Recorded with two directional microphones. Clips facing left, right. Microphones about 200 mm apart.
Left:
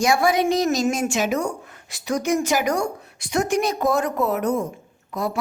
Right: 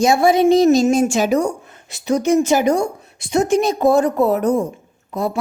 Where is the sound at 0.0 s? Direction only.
25° right (ahead or behind).